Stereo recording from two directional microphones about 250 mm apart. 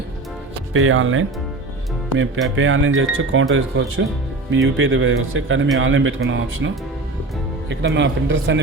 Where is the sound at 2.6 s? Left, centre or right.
Right.